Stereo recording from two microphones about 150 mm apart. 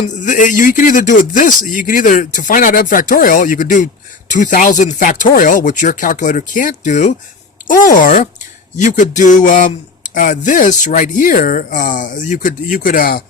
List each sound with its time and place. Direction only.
0.1 s speech: 55° left (ahead or behind); by 13.2 s 75° left (ahead or behind)